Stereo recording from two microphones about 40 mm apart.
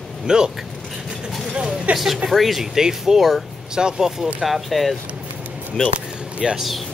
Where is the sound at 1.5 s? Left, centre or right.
Right.